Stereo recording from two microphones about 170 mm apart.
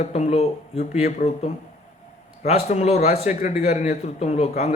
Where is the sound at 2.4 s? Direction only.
45° left (ahead or behind).